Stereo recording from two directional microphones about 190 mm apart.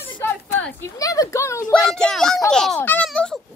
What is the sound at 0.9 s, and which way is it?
Speech, 20° left (ahead or behind).